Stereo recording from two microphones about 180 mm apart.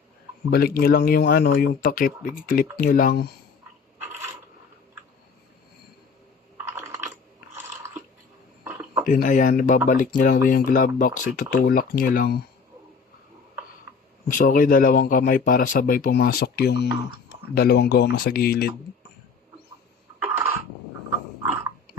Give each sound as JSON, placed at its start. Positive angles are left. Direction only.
{"t": 0.5, "sound": "speech", "side_deg": 55}
{"t": 6.7, "sound": "typing", "side_deg": -15}
{"t": 8.6, "sound": "a sound", "side_deg": -10}
{"t": 9.0, "sound": "speech", "side_deg": 45}
{"t": 14.3, "sound": "speech", "side_deg": 50}
{"t": 20.2, "sound": "cough", "side_deg": -10}